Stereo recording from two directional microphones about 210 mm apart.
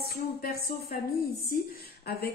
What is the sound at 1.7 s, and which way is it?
Speech, 50° left (ahead or behind).